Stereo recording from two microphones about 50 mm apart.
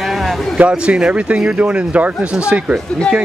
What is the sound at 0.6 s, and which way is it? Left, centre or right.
Speech, right.